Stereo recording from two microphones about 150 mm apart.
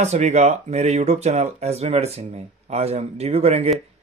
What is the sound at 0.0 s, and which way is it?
Speech, 50° right (ahead or behind).